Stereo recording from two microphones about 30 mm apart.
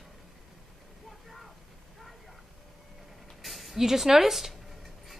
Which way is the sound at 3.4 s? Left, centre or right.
Centre.